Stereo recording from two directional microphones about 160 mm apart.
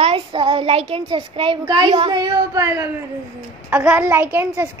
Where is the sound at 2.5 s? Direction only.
15° right (ahead or behind).